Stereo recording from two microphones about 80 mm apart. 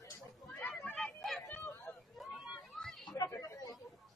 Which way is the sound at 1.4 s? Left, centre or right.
Left.